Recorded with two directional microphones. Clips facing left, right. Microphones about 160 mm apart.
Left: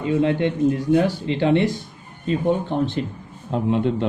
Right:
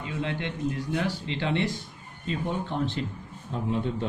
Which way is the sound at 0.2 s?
45° left (ahead or behind).